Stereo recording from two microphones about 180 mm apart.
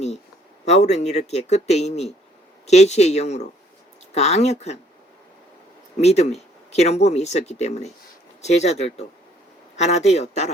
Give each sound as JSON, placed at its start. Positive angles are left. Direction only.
{"t": 0.6, "sound": "speech", "side_deg": 40}
{"t": 6.0, "sound": "speech", "side_deg": 35}